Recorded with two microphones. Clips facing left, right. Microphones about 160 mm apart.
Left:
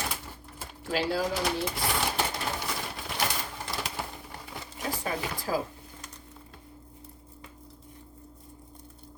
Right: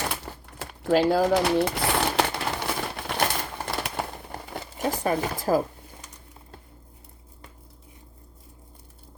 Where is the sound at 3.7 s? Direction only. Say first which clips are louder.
Right 6 dB; 60° right (ahead or behind).